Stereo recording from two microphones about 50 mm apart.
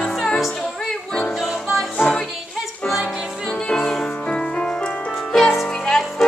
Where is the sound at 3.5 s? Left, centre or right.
Centre.